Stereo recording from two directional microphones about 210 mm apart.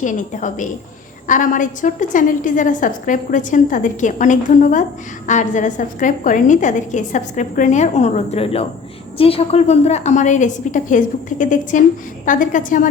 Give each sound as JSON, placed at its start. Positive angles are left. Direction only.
{"t": 0.0, "sound": "a woman's voice", "side_deg": 35}